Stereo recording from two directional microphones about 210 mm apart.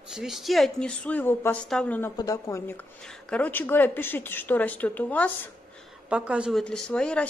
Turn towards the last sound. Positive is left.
turn(degrees=5)  # may be behind; listen again after turning